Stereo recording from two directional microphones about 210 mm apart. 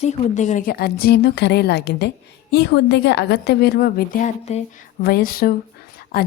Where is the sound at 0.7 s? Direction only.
50° left (ahead or behind).